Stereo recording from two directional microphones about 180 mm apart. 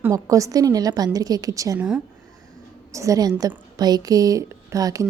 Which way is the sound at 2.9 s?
20° right (ahead or behind).